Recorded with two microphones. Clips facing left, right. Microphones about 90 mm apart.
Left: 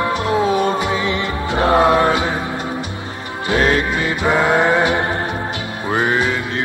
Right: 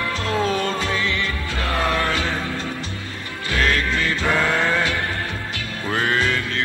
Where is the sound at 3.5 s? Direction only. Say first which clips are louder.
Left 5 dB; 25° left (ahead or behind).